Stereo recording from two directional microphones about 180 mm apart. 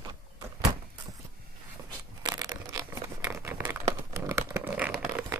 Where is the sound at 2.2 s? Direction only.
20° right (ahead or behind).